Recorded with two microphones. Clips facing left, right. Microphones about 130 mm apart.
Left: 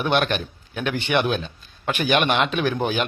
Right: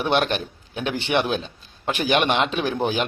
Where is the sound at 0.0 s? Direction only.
35° right (ahead or behind).